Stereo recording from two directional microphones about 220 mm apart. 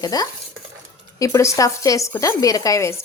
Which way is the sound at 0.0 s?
15° left (ahead or behind).